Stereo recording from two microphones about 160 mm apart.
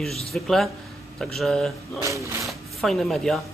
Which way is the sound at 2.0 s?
20° right (ahead or behind).